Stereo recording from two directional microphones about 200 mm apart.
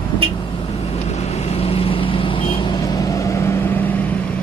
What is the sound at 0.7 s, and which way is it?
Vehicle, 30° left (ahead or behind).